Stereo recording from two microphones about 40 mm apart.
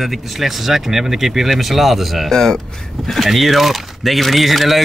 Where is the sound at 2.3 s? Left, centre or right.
Centre.